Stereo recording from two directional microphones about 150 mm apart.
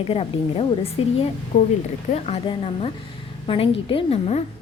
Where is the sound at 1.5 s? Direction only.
65° left (ahead or behind).